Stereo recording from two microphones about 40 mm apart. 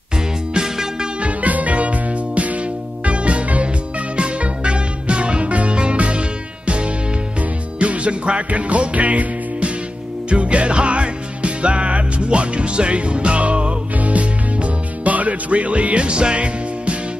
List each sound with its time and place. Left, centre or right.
0.6 s music: centre
1.2 s music: right